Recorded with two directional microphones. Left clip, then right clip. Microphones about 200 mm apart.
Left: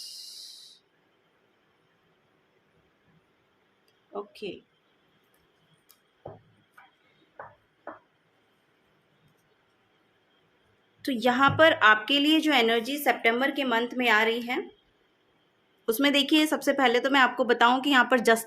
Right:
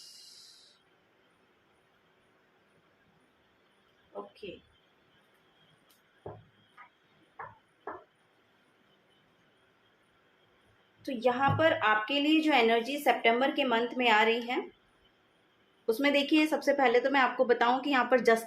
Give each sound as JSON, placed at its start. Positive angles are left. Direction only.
{"t": 4.4, "sound": "speech", "side_deg": 55}
{"t": 11.0, "sound": "a woman's voice", "side_deg": 45}
{"t": 15.9, "sound": "speech", "side_deg": 30}